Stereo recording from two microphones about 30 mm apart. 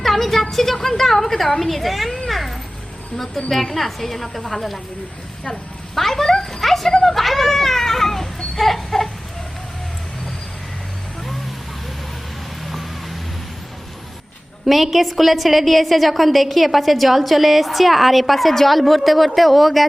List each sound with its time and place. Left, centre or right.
0.0 s a sound: centre
3.2 s a woman's voice: centre
5.9 s cat: centre
6.3 s music: centre
6.6 s dog: centre
7.0 s children playing: centre
8.5 s chicken: centre
14.7 s a woman's voice: centre